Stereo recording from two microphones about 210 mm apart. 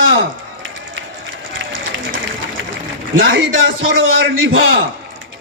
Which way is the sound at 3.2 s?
65° right (ahead or behind).